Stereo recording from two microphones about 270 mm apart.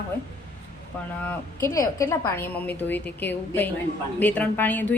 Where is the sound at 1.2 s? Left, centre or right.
Centre.